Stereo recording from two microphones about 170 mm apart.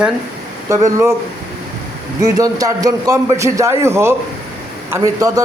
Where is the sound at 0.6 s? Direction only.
15° right (ahead or behind).